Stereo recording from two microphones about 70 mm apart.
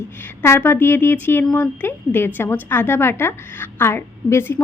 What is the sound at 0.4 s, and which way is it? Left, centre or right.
A woman's voice, left.